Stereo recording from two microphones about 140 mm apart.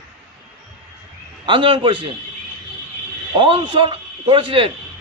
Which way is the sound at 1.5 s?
40° right (ahead or behind).